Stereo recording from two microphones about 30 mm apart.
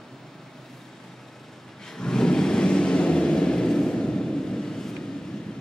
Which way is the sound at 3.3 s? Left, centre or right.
Left.